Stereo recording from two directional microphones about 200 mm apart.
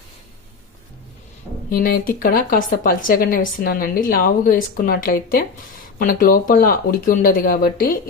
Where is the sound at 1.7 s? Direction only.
45° left (ahead or behind).